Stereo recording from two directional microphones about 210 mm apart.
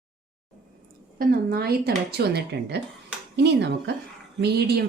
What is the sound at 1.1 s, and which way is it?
Speech, 45° right (ahead or behind).